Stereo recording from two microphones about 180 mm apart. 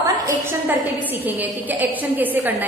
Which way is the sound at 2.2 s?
10° right (ahead or behind).